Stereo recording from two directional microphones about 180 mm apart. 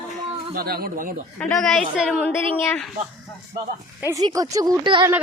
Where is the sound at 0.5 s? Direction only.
55° right (ahead or behind).